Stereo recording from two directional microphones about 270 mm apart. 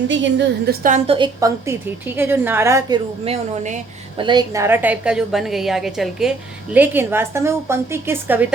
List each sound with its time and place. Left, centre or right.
0.1 s a woman's voice: right; by 3.0 s centre
3.2 s a woman's voice: right; by 8.5 s centre